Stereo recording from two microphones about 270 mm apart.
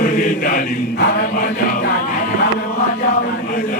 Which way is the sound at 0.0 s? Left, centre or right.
Left.